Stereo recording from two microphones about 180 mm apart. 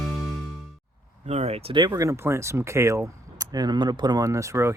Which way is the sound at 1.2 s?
35° right (ahead or behind).